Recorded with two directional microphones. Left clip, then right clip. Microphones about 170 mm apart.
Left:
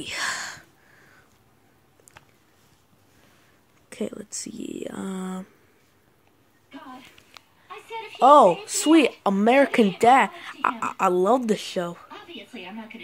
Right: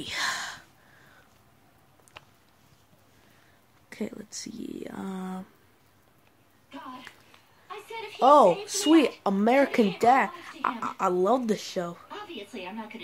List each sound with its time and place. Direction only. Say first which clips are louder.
0.0 s a sound: left 1 dB; 10° left (ahead or behind)
3.9 s speech: left 5 dB; 10° left (ahead or behind)
8.2 s speech: left 4 dB; 15° left (ahead or behind)